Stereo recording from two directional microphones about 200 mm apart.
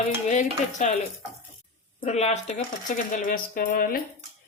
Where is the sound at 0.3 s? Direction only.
35° left (ahead or behind).